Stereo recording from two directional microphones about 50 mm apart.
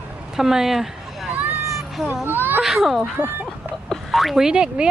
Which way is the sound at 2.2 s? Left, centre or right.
Right.